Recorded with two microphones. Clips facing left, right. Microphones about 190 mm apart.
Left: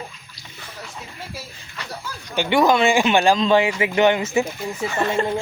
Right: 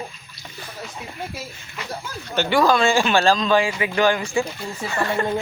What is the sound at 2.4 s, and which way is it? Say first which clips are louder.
Speech: left 1 dB; 20° left (ahead or behind).